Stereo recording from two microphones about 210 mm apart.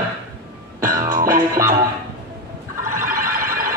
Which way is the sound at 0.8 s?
40° right (ahead or behind).